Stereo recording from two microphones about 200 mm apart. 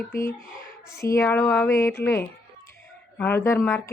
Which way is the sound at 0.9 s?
15° left (ahead or behind).